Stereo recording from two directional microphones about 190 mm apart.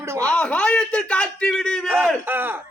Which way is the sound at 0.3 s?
5° left (ahead or behind).